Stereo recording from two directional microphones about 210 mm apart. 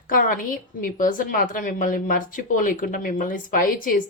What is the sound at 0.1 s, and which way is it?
A woman's voice, 40° left (ahead or behind).